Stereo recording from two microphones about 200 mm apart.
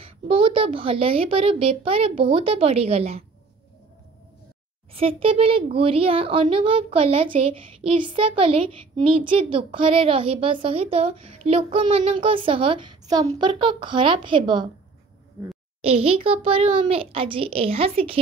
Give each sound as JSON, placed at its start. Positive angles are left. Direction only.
{"t": 0.0, "sound": "a child's voice", "side_deg": -25}
{"t": 4.9, "sound": "a child's voice", "side_deg": -30}
{"t": 15.8, "sound": "a child's voice", "side_deg": -30}